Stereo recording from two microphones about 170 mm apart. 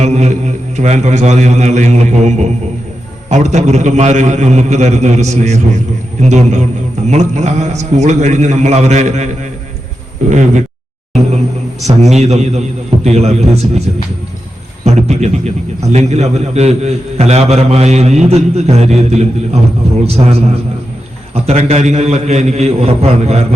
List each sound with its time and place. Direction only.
0.0 s a man's voice: 40° right (ahead or behind)
12.0 s a man's voice: 40° right (ahead or behind)